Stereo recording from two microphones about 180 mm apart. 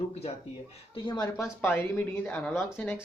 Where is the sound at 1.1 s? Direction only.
20° left (ahead or behind).